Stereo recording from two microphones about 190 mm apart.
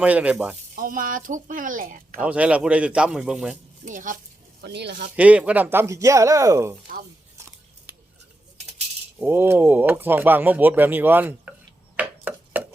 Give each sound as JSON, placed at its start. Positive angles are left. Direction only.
{"t": 0.0, "sound": "speech", "side_deg": -5}
{"t": 0.8, "sound": "speech", "side_deg": -45}
{"t": 2.2, "sound": "speech", "side_deg": -5}
{"t": 3.8, "sound": "speech", "side_deg": -45}
{"t": 4.6, "sound": "speech", "side_deg": -60}
{"t": 5.1, "sound": "speech", "side_deg": -5}
{"t": 7.3, "sound": "scissors", "side_deg": -15}
{"t": 9.2, "sound": "speech", "side_deg": -10}
{"t": 11.9, "sound": "a sound", "side_deg": -10}